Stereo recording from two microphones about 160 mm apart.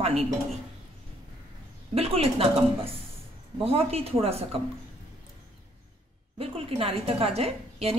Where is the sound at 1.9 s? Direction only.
40° right (ahead or behind).